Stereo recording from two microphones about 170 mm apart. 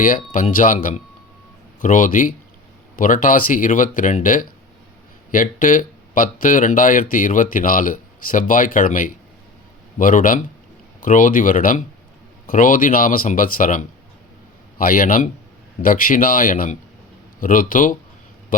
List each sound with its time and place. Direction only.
0.0 s speech: 50° left (ahead or behind)